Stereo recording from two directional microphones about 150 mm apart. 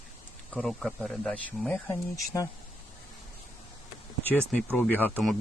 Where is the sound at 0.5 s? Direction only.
5° left (ahead or behind); by 2.5 s 20° left (ahead or behind).